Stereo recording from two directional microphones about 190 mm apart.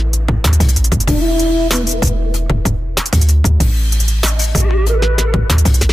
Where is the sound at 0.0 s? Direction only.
Centre (ahead or behind).